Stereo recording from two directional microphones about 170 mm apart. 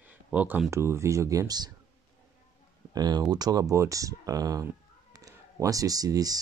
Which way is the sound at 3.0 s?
25° right (ahead or behind).